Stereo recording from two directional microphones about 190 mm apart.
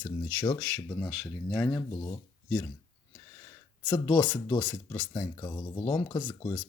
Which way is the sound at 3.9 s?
15° left (ahead or behind).